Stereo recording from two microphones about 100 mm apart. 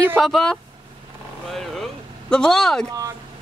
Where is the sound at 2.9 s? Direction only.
35° right (ahead or behind).